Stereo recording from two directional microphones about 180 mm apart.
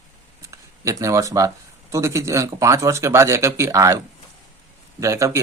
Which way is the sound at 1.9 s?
15° right (ahead or behind).